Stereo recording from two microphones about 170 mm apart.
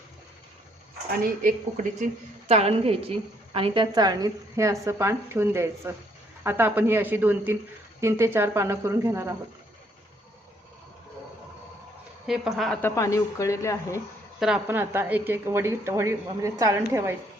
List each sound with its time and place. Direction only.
1.2 s a woman's voice: 55° right (ahead or behind)
2.5 s a woman's voice: 40° right (ahead or behind); by 9.3 s 15° right (ahead or behind)
12.2 s a woman's voice: centre (ahead or behind)
12.8 s speech: 20° left (ahead or behind)
14.3 s a woman's voice: 5° right (ahead or behind)